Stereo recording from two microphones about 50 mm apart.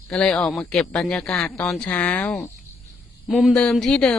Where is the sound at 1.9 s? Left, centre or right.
Left.